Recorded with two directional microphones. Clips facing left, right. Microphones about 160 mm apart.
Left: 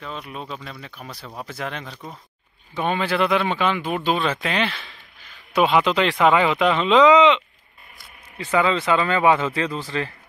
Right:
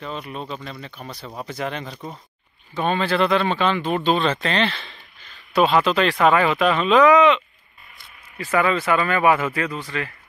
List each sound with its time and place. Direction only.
0.0 s speech: centre (ahead or behind)
2.7 s speech: 15° left (ahead or behind)
5.5 s speech: 15° left (ahead or behind)